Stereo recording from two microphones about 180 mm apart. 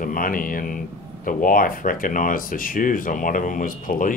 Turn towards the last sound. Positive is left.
turn(degrees=50)  # may be behind; listen again after turning